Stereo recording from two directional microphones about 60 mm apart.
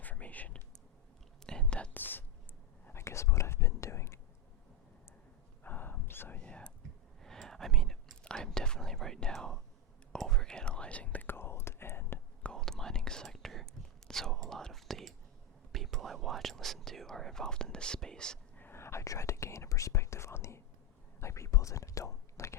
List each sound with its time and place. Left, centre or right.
0.0 s whispering: left
1.5 s whispering: centre
1.9 s whispering: left
2.9 s whispering: left
5.6 s whispering: left
6.4 s whispering: centre
7.2 s whispering: centre; by 11.3 s left
11.3 s whispering: left
12.5 s whispering: centre
18.5 s whispering: left